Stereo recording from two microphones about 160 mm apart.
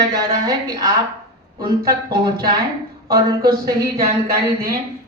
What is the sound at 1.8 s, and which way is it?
Speech, 70° right (ahead or behind).